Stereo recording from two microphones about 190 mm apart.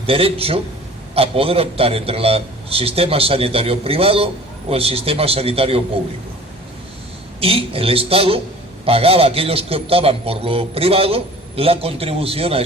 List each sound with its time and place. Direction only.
0.1 s a man's voice: 30° right (ahead or behind)
7.3 s a man's voice: 30° right (ahead or behind)